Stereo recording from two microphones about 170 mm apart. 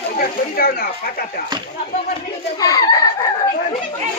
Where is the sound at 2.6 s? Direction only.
20° left (ahead or behind).